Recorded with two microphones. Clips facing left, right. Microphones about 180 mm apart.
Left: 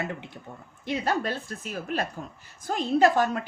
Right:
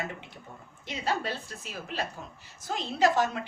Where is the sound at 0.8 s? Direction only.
55° left (ahead or behind).